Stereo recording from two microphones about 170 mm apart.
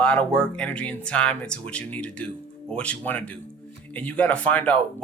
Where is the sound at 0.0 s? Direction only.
5° left (ahead or behind).